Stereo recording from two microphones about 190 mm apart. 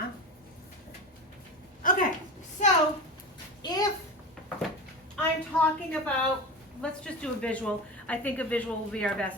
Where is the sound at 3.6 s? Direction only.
20° left (ahead or behind).